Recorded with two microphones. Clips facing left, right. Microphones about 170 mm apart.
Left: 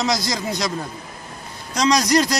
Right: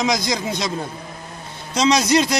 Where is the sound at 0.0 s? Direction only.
20° right (ahead or behind).